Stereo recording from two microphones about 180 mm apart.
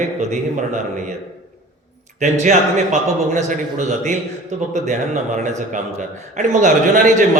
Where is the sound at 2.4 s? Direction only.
40° right (ahead or behind).